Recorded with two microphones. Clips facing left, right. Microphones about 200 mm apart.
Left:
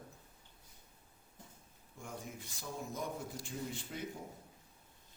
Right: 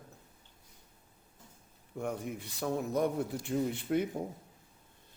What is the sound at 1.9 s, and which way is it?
A man's voice, 65° right (ahead or behind).